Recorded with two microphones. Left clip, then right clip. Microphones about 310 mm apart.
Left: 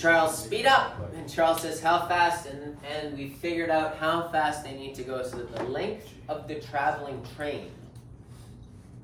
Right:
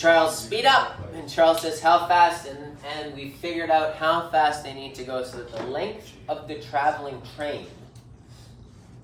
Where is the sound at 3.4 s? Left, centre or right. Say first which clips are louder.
Right 4 dB; centre.